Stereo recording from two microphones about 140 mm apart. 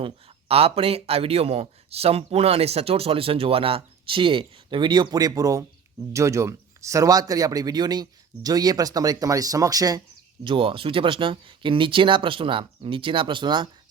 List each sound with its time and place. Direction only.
0.0 s speech: 45° right (ahead or behind); by 10.0 s 25° right (ahead or behind)
10.4 s speech: 40° right (ahead or behind)